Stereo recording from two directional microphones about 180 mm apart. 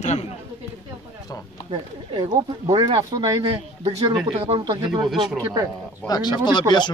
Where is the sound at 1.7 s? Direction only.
25° right (ahead or behind).